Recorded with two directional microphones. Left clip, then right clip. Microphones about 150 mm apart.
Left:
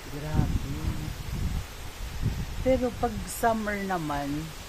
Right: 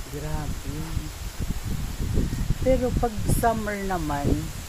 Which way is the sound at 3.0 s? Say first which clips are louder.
Right 3 dB; 15° right (ahead or behind).